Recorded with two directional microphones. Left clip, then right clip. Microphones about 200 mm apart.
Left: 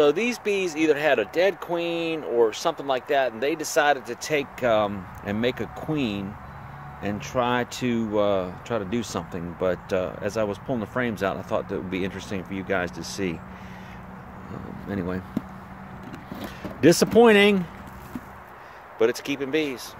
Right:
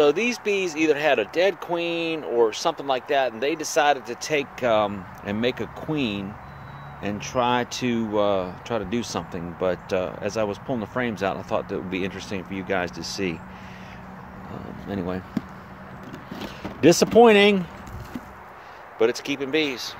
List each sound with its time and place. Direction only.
0.0 s speech: centre (ahead or behind)
14.5 s speech: centre (ahead or behind)
16.4 s speech: 5° left (ahead or behind)
18.9 s speech: centre (ahead or behind)